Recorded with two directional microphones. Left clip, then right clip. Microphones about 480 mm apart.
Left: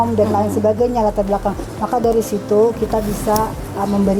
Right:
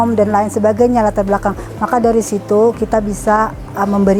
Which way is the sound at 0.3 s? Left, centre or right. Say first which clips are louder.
Right 3 dB; right.